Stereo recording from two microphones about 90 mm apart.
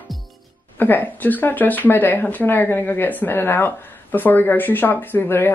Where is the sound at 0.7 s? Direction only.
20° left (ahead or behind).